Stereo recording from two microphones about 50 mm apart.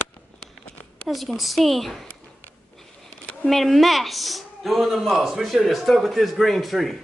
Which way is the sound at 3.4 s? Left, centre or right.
Centre.